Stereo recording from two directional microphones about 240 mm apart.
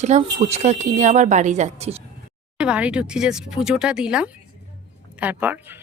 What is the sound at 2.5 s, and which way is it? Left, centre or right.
Speech, centre.